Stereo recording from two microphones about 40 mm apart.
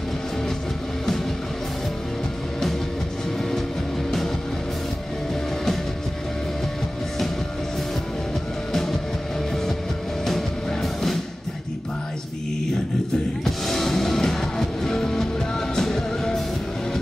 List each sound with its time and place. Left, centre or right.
3.3 s music: centre
10.2 s music: centre
13.4 s music: centre